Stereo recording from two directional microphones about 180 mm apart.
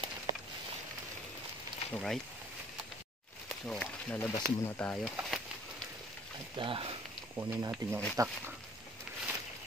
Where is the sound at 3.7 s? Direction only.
5° left (ahead or behind).